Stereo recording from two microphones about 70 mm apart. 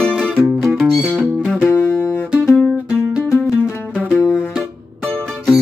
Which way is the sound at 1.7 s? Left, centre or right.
Left.